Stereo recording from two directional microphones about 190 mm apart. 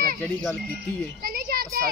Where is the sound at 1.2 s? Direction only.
50° right (ahead or behind).